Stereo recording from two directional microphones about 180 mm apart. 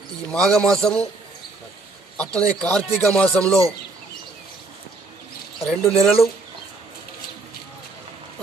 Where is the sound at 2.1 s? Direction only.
5° left (ahead or behind).